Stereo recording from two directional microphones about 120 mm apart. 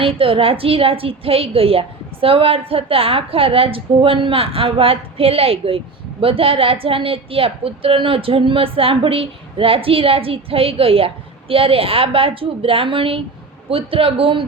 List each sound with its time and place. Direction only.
0.0 s a woman's voice: 50° right (ahead or behind)